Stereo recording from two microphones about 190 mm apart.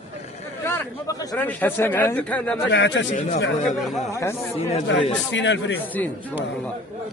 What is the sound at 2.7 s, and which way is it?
Speech, 70° left (ahead or behind).